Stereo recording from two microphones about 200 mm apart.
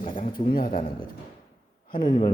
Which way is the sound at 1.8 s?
40° left (ahead or behind).